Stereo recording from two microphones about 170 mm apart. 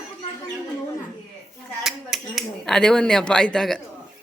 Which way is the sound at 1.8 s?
Centre (ahead or behind).